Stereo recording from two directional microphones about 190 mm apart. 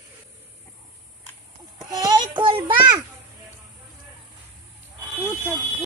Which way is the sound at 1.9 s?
20° right (ahead or behind).